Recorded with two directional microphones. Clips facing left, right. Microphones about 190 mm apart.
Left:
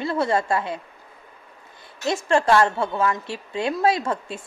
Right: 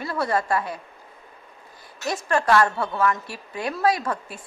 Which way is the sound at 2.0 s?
25° left (ahead or behind).